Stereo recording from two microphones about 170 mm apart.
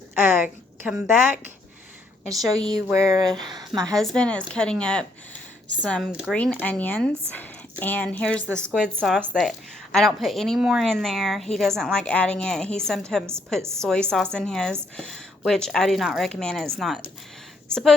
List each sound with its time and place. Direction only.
0.2 s a woman's voice: 10° right (ahead or behind)
2.4 s a woman's voice: centre (ahead or behind)
2.9 s a sound: 15° right (ahead or behind)
3.5 s a woman's voice: 25° right (ahead or behind)
3.8 s a woman's voice: 5° left (ahead or behind)
6.1 s a woman's voice: 5° right (ahead or behind)
6.3 s speech: 10° left (ahead or behind)
8.4 s a woman's voice: 15° right (ahead or behind)
8.7 s a woman's voice: centre (ahead or behind)
13.6 s a woman's voice: 15° right (ahead or behind)
13.8 s a woman's voice: 5° left (ahead or behind)